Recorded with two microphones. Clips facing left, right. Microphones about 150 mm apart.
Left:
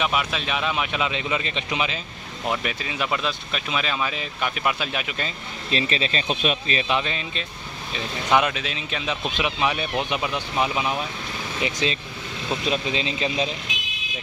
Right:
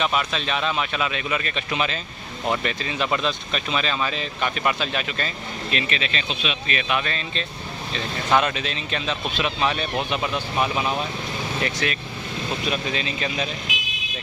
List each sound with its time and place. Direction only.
0.0 s speech: 10° left (ahead or behind)
5.7 s speech: 35° left (ahead or behind)
6.2 s speech: 45° left (ahead or behind)
6.7 s speech: 25° left (ahead or behind); by 11.0 s 10° left (ahead or behind)
11.6 s speech: 20° left (ahead or behind)